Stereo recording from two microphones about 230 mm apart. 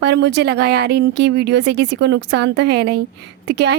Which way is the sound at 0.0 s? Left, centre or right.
Right.